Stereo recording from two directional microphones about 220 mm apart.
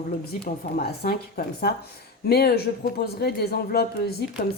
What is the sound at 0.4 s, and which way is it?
A woman's voice, 45° left (ahead or behind).